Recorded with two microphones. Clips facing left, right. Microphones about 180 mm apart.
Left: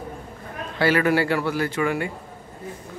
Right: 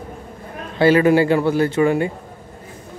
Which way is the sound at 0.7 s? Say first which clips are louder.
Right 7 dB; 20° right (ahead or behind).